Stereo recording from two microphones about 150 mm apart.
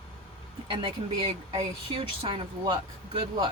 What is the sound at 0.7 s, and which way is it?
Speech, 35° right (ahead or behind).